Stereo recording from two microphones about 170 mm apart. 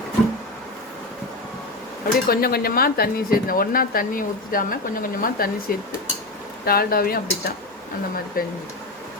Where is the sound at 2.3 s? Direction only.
60° left (ahead or behind).